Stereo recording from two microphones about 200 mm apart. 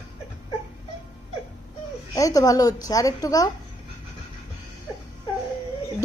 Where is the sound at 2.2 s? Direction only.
15° left (ahead or behind).